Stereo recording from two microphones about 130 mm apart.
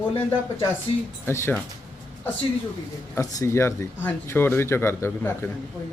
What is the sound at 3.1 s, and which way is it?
Speech, 25° left (ahead or behind).